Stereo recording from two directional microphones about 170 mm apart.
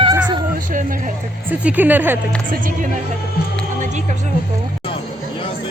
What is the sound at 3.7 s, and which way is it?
Music, 45° right (ahead or behind).